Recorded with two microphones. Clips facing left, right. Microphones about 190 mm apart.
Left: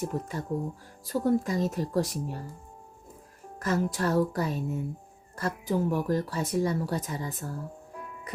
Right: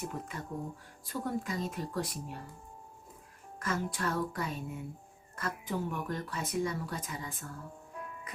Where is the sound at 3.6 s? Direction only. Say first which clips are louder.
Left 7 dB; 40° left (ahead or behind).